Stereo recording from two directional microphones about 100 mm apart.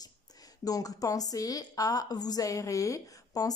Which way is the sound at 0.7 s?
35° left (ahead or behind).